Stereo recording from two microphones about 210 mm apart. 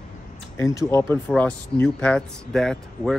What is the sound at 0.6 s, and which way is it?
Speech, 15° left (ahead or behind).